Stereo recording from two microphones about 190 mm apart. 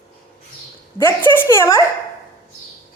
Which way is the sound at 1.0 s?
10° left (ahead or behind).